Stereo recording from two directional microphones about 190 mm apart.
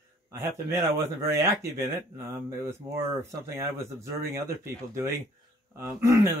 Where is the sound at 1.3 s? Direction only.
15° right (ahead or behind).